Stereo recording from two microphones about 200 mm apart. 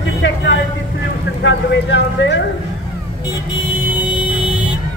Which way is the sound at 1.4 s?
65° left (ahead or behind).